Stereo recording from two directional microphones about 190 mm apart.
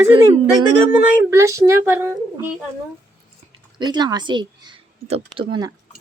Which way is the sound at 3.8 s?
20° right (ahead or behind).